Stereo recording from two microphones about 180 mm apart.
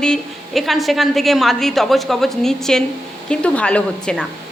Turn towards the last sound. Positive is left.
turn(degrees=5)  # may be behind; listen again after turning